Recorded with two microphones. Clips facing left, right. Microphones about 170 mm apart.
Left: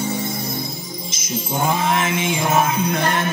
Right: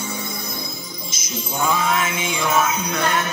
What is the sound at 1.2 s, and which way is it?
Music, 50° left (ahead or behind).